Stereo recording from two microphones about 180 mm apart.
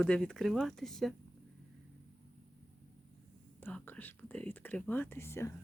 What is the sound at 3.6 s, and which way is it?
Speech, 10° left (ahead or behind).